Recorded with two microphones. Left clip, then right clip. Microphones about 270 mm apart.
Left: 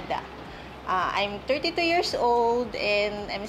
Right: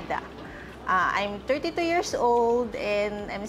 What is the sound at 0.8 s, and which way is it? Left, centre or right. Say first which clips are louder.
A woman's voice: right 2 dB; right.